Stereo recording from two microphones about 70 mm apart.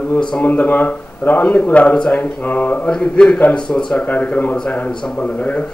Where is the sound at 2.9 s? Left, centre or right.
Centre.